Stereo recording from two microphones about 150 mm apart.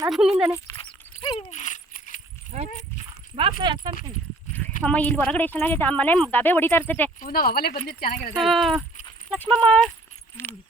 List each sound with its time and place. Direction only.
0.1 s speech: 5° right (ahead or behind)
0.8 s dog: 35° left (ahead or behind)
1.5 s a sound: 55° left (ahead or behind)
3.3 s speech: 30° right (ahead or behind)
4.8 s a woman's voice: 10° left (ahead or behind)
7.2 s speech: 80° left
8.4 s a woman's voice: centre (ahead or behind)